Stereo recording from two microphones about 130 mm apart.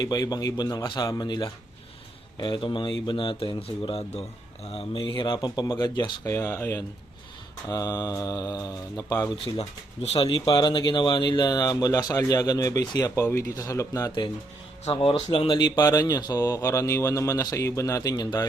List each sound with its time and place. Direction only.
0.0 s speech: 30° left (ahead or behind)
6.3 s speech: 25° left (ahead or behind)
9.6 s speech: 50° left (ahead or behind); by 14.3 s 25° left (ahead or behind)
14.8 s speech: 45° left (ahead or behind)
15.5 s speech: 35° left (ahead or behind)